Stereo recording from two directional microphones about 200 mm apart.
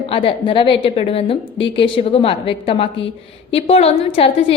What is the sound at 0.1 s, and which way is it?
A woman's voice, 25° left (ahead or behind).